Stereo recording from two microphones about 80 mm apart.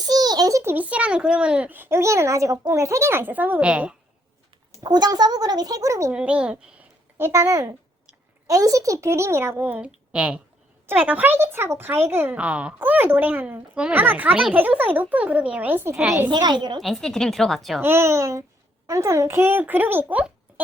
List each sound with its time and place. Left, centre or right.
0.0 s a sound: right
0.6 s a child's voice: right
0.9 s a child's voice: centre
2.0 s a child's voice: right; by 3.9 s centre
4.8 s a child's voice: right
6.1 s a child's voice: centre
7.3 s speech: right
9.6 s a child's voice: centre
11.3 s a child's voice: right
12.4 s a child's voice: centre
16.3 s a child's voice: right
16.8 s a woman's voice: centre
17.7 s a child's voice: right